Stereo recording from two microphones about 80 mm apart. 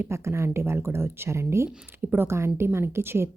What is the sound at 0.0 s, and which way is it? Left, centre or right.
Speech, right.